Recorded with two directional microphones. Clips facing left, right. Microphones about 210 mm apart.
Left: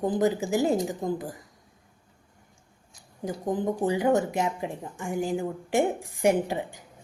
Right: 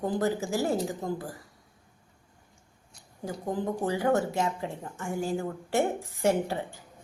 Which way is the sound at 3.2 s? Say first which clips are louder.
Left 3 dB; 20° left (ahead or behind).